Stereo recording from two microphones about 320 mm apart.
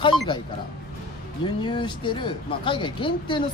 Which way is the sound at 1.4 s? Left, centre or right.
Centre.